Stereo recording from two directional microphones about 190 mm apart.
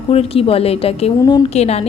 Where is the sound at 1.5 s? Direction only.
35° left (ahead or behind).